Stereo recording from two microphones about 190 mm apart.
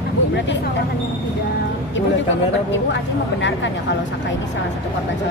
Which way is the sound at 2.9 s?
75° left (ahead or behind).